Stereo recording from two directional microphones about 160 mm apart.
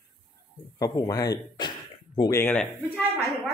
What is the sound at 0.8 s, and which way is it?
Speech, 20° left (ahead or behind).